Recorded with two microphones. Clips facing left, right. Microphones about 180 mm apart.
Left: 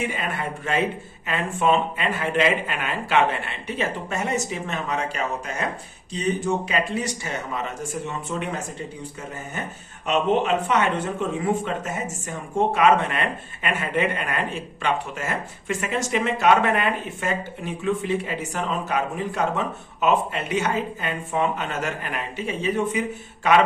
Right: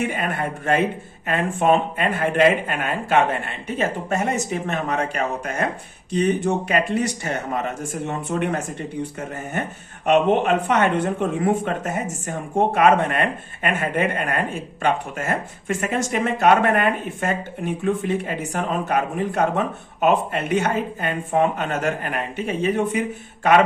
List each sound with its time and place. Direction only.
0.0 s speech: 55° right (ahead or behind)
10.1 s speech: 55° right (ahead or behind)